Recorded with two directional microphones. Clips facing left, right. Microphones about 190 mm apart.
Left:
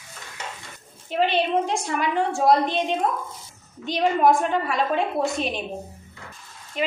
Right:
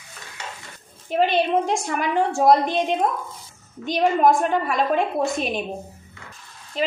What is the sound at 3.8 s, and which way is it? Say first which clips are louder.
A woman's voice: right 1 dB; 45° right (ahead or behind).